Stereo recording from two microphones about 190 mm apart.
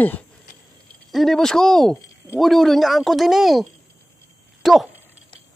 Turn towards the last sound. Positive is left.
turn(degrees=0)  # may be behind; listen again after turning